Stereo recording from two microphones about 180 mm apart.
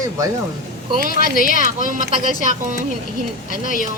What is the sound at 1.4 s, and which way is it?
Speech, 50° left (ahead or behind).